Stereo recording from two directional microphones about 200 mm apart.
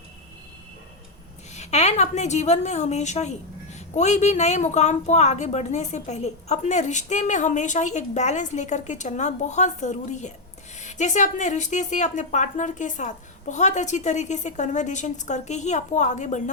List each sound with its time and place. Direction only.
1.5 s a woman's voice: 35° left (ahead or behind)